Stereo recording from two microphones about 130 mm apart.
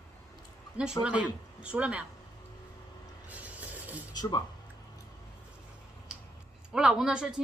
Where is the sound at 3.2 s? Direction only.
10° right (ahead or behind).